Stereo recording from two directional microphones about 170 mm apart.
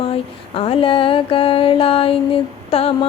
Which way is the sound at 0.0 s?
35° left (ahead or behind).